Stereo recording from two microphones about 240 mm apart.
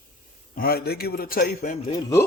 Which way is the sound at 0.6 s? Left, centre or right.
Left.